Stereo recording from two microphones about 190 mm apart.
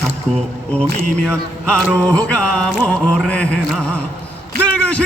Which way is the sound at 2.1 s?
5° left (ahead or behind).